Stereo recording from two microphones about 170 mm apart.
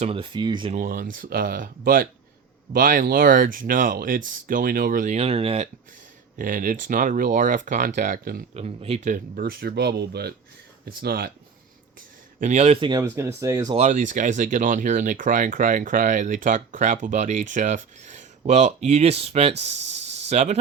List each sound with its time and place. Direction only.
0.0 s speech: 30° right (ahead or behind)
0.8 s speech: 55° right (ahead or behind)
5.1 s speech: 35° right (ahead or behind)
6.4 s speech: 50° right (ahead or behind)
8.5 s speech: 40° right (ahead or behind)
9.1 s speech: 60° right (ahead or behind); by 10.3 s 75° right (ahead or behind)
10.8 s speech: 60° right (ahead or behind)
12.4 s speech: 40° right (ahead or behind)
13.0 s speech: 15° right (ahead or behind)
13.7 s speech: 45° right (ahead or behind)